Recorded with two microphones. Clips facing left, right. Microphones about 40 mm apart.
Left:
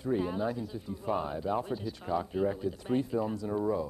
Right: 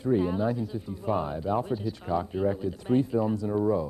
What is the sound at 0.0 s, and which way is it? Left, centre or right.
Speech, right.